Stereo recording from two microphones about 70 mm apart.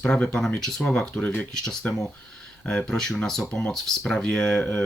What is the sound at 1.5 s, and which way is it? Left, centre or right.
Speech, centre.